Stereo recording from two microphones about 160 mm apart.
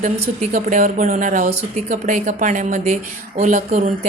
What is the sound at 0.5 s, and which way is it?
A woman's voice, 55° right (ahead or behind).